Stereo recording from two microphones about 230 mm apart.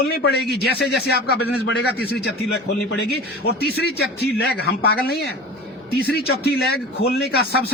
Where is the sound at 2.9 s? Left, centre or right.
Left.